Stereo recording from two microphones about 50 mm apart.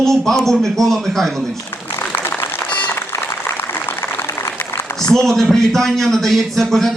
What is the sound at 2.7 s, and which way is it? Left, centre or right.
Applause, left.